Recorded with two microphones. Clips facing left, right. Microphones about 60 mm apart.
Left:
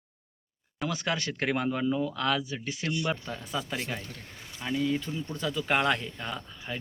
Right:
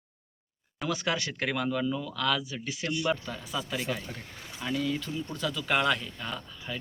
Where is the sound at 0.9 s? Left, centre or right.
Left.